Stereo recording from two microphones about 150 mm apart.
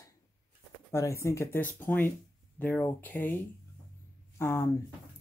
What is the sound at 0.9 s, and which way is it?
Speech, 20° left (ahead or behind).